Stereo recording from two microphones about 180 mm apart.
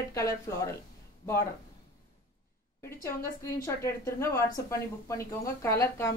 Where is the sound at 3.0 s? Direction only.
15° left (ahead or behind).